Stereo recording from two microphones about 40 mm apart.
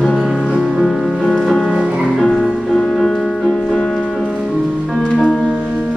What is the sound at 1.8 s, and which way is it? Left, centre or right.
Music, right.